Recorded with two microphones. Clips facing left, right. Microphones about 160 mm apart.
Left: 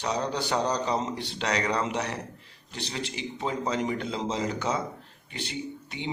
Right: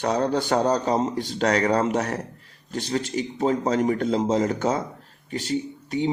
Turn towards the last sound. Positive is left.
turn(degrees=-40)  # may be behind; listen again after turning